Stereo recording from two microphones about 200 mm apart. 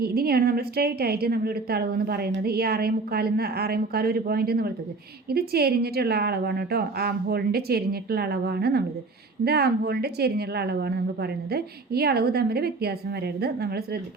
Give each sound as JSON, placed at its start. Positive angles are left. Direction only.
{"t": 0.0, "sound": "a woman's voice", "side_deg": -50}